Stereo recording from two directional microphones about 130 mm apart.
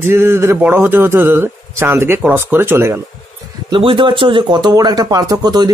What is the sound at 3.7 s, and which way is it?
Speech, 40° right (ahead or behind).